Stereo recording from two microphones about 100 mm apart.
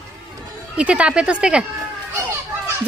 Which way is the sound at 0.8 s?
10° right (ahead or behind).